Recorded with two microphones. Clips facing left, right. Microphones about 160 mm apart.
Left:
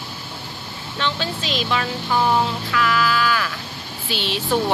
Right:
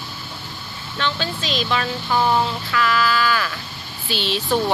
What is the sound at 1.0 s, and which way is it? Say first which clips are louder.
Speech: even; 20° left (ahead or behind).